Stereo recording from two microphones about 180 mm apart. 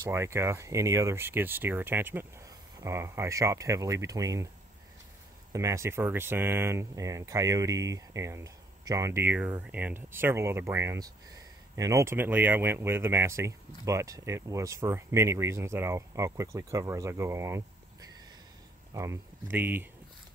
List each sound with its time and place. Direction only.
0.0 s speech: 15° right (ahead or behind)
5.5 s speech: 15° right (ahead or behind)
18.9 s speech: 15° right (ahead or behind)